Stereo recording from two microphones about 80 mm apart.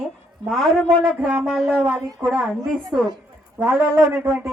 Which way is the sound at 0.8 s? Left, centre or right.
Centre.